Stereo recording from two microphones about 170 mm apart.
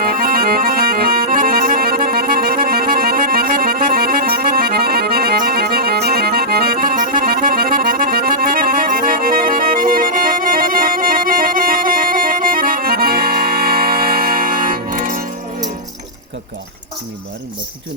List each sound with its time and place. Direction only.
0.0 s accordion: 60° right (ahead or behind)